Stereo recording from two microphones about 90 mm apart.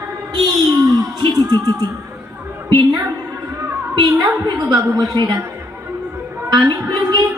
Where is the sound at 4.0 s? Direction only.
55° right (ahead or behind).